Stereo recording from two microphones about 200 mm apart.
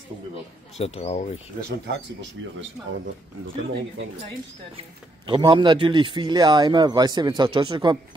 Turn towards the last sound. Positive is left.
turn(degrees=-25)  # may be behind; listen again after turning